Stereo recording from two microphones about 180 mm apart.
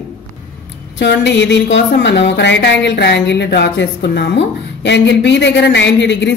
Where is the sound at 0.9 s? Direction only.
80° left.